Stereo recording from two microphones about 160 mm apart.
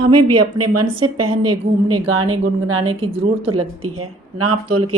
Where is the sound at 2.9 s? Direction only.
35° right (ahead or behind).